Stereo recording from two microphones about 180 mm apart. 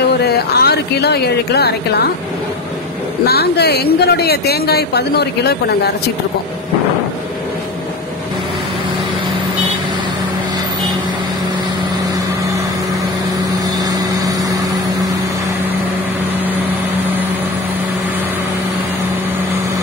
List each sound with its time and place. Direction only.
0.2 s speech: 65° left (ahead or behind)
3.3 s speech: 65° left (ahead or behind)
13.8 s vehicle: 20° right (ahead or behind)